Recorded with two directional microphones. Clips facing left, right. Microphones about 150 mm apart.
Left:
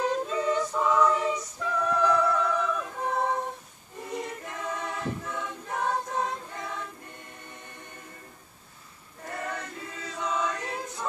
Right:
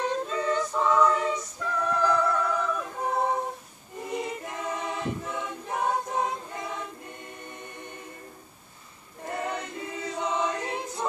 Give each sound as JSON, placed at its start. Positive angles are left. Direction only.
{"t": 0.0, "sound": "a capella", "side_deg": 5}
{"t": 4.0, "sound": "choir", "side_deg": -10}
{"t": 9.2, "sound": "choir", "side_deg": -20}